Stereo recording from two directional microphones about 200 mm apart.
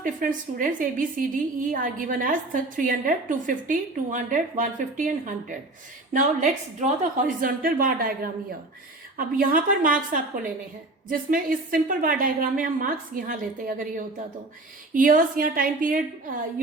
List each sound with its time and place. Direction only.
0.0 s a woman's voice: 40° right (ahead or behind)